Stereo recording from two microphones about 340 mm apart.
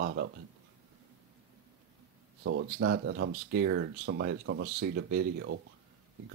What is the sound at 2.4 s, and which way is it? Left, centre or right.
Speech, right.